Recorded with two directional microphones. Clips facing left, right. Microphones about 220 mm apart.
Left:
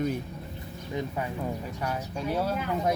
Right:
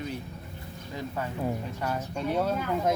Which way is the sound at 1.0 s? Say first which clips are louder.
Left 2 dB; 15° left (ahead or behind).